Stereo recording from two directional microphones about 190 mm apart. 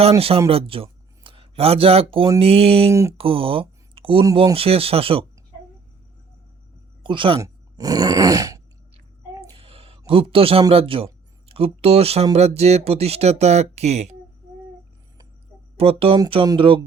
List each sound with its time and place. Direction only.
0.2 s a man's voice: 30° right (ahead or behind)
2.9 s speech: 15° right (ahead or behind)
3.2 s speech: 30° right (ahead or behind)
7.0 s speech: 25° right (ahead or behind)
7.4 s groan: 20° right (ahead or behind)
9.6 s a sound: 30° right (ahead or behind)
10.1 s speech: 30° right (ahead or behind)
15.8 s speech: 30° right (ahead or behind)